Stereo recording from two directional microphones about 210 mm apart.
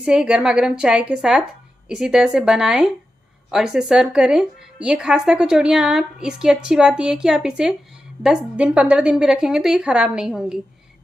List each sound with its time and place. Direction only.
0.0 s speech: 5° right (ahead or behind)